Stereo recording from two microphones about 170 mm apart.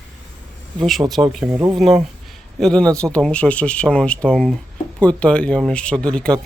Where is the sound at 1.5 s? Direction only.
15° right (ahead or behind).